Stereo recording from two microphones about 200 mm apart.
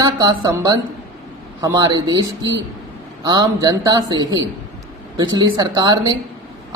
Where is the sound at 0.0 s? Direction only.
20° right (ahead or behind).